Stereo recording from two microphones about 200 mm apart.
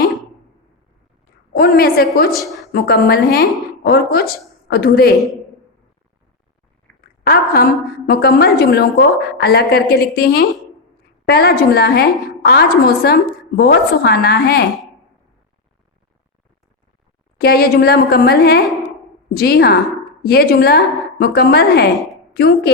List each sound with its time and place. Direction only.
1.5 s a woman's voice: 50° left (ahead or behind)
2.4 s a woman's voice: centre (ahead or behind)
2.7 s a woman's voice: 50° left (ahead or behind)
5.1 s a man's voice: centre (ahead or behind)
6.9 s a sound: 10° left (ahead or behind)
7.3 s a woman's voice: 45° left (ahead or behind)
17.3 s a woman's voice: 50° left (ahead or behind)
21.9 s a woman's voice: centre (ahead or behind)
22.4 s a woman's voice: 50° left (ahead or behind)